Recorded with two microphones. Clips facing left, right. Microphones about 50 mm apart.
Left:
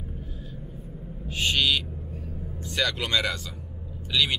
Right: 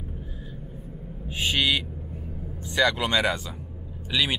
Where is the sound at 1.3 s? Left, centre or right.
Centre.